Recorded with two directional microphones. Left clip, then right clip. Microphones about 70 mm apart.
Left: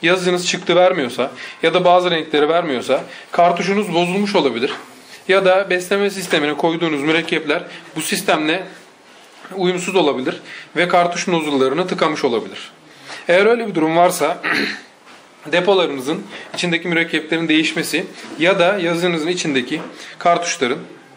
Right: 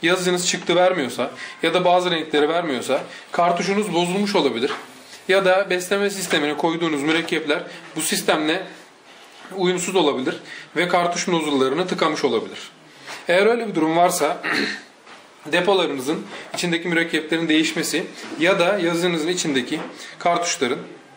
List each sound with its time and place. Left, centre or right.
0.0 s speech: left